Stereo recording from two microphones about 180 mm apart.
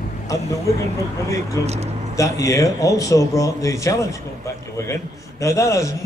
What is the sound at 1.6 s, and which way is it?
A man's voice, 15° left (ahead or behind).